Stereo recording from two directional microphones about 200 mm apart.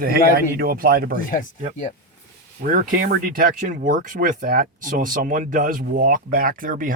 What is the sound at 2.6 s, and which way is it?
Speech, 40° right (ahead or behind).